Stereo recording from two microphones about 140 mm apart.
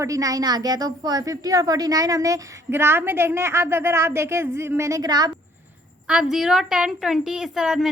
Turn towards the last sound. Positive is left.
turn(degrees=-5)  # may be behind; listen again after turning